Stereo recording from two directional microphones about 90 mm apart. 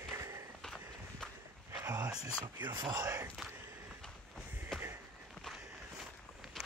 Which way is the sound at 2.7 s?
50° right (ahead or behind).